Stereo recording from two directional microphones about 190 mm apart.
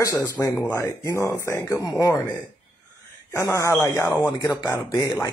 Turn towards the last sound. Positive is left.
turn(degrees=20)  # may be behind; listen again after turning